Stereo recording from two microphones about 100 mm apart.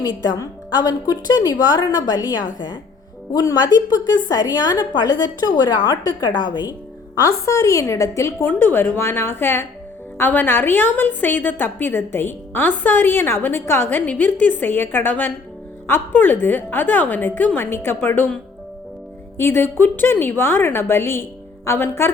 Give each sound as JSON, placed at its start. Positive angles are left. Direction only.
{"t": 0.0, "sound": "a woman's voice", "side_deg": 45}
{"t": 7.2, "sound": "a woman's voice", "side_deg": 35}
{"t": 19.4, "sound": "a woman's voice", "side_deg": 25}